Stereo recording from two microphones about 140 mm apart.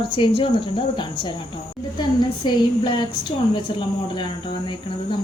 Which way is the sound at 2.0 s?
35° left (ahead or behind).